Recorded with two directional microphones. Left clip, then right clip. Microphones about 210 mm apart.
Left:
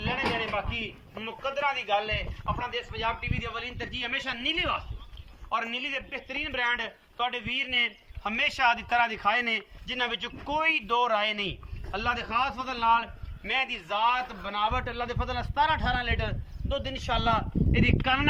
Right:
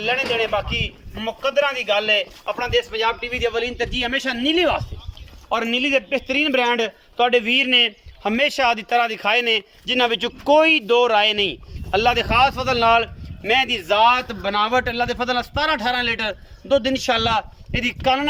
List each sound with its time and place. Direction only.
0.3 s a man's voice: 45° right (ahead or behind)